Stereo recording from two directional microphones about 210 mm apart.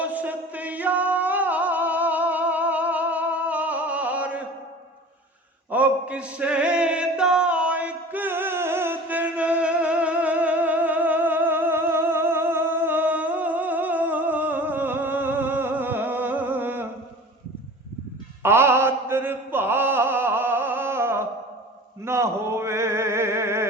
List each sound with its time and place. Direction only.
0.0 s music: 5° right (ahead or behind)
5.7 s a sound: 5° right (ahead or behind)
18.4 s chant: 10° right (ahead or behind)
22.0 s male singing: 10° right (ahead or behind)